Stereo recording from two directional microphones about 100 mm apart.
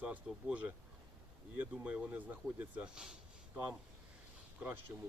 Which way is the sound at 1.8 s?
15° right (ahead or behind).